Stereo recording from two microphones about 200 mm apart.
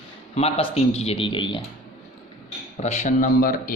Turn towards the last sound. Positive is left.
turn(degrees=45)  # may be behind; listen again after turning